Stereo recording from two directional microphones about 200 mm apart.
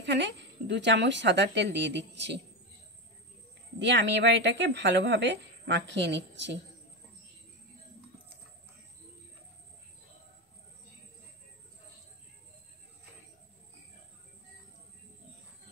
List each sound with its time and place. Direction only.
0.0 s a woman's voice: 60° right (ahead or behind)
3.8 s a woman's voice: 60° right (ahead or behind)